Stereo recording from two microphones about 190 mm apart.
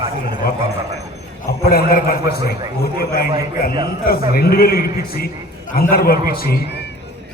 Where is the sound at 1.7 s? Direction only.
50° left (ahead or behind).